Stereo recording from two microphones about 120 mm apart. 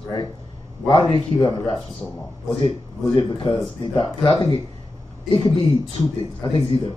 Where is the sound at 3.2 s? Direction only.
45° left (ahead or behind).